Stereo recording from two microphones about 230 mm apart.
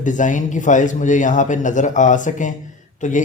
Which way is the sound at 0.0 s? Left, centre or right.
Left.